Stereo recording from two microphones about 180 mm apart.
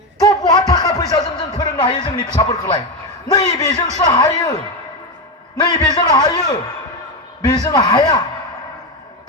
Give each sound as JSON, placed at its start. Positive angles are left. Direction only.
{"t": 0.2, "sound": "a sound", "side_deg": 20}
{"t": 1.1, "sound": "music", "side_deg": 20}
{"t": 1.7, "sound": "a man's voice", "side_deg": 25}
{"t": 5.5, "sound": "a man's voice", "side_deg": 25}